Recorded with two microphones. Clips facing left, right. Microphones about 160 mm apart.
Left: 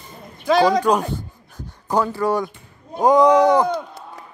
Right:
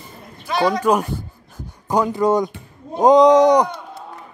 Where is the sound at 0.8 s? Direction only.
10° right (ahead or behind).